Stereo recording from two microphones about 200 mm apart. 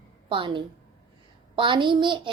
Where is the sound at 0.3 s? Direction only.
25° right (ahead or behind).